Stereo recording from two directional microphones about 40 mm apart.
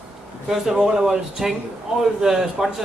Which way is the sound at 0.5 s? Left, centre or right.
Centre.